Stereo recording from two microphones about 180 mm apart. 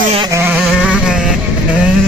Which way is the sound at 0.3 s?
10° right (ahead or behind).